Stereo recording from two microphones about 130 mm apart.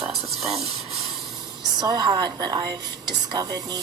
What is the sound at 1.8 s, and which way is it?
Speech, 30° right (ahead or behind).